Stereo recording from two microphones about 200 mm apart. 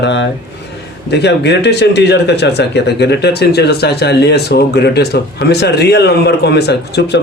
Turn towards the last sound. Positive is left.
turn(degrees=55)  # may be behind; listen again after turning